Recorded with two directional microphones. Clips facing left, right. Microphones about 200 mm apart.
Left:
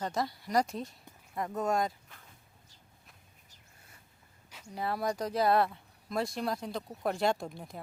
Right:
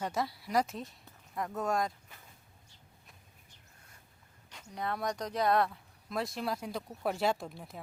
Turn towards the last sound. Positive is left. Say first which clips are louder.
# left 2 dB
turn(degrees=0)  # may be behind; listen again after turning